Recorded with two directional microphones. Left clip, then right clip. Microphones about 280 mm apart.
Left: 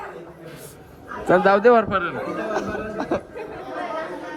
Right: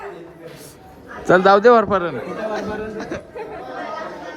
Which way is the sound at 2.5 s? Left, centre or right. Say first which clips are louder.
Right 1 dB; centre.